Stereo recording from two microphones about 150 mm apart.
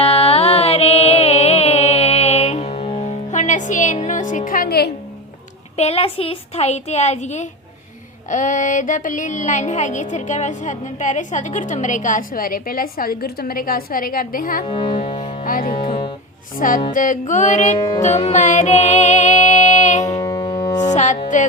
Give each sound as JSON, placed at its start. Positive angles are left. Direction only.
{"t": 0.0, "sound": "music", "side_deg": 40}
{"t": 5.7, "sound": "speech", "side_deg": 45}
{"t": 8.3, "sound": "music", "side_deg": 55}
{"t": 14.7, "sound": "speech", "side_deg": 35}
{"t": 15.1, "sound": "music", "side_deg": 40}
{"t": 15.4, "sound": "speech", "side_deg": 65}
{"t": 15.9, "sound": "music", "side_deg": 35}
{"t": 16.6, "sound": "music", "side_deg": 65}
{"t": 20.1, "sound": "music", "side_deg": 25}
{"t": 20.7, "sound": "music", "side_deg": 55}